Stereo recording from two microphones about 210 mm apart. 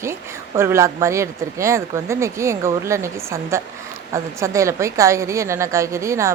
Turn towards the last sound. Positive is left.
turn(degrees=-15)  # may be behind; listen again after turning